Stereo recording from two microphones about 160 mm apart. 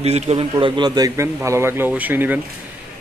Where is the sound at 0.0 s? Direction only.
40° right (ahead or behind).